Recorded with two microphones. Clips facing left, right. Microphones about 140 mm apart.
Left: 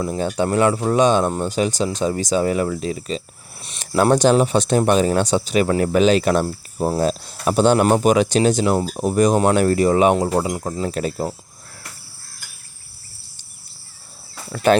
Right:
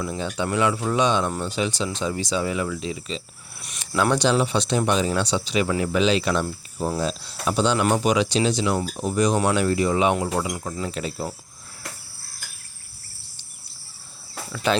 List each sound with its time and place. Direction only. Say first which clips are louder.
0.2 s speech: left 6 dB; 45° left (ahead or behind)
3.6 s cricket: left 2 dB; 30° left (ahead or behind)
3.9 s speech: left 6 dB; 45° left (ahead or behind)
14.5 s speech: left 7 dB; 50° left (ahead or behind)